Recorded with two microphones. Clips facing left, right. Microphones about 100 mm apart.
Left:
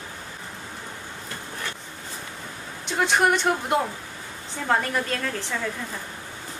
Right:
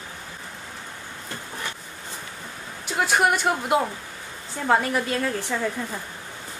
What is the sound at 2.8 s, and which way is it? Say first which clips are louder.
A woman's voice: even; 5° right (ahead or behind).